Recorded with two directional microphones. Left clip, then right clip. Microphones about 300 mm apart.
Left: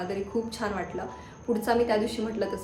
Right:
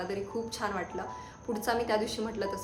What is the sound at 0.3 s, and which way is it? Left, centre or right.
Speech, centre.